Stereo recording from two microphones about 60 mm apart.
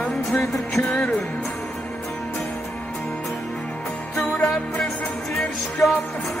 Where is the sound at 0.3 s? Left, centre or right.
Centre.